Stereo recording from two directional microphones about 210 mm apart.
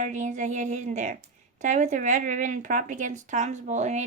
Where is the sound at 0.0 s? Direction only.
35° right (ahead or behind).